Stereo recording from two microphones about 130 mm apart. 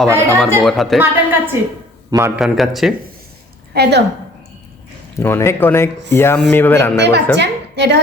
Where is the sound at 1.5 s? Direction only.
20° right (ahead or behind).